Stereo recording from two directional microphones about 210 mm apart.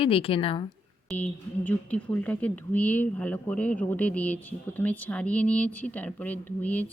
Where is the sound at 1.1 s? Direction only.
5° left (ahead or behind).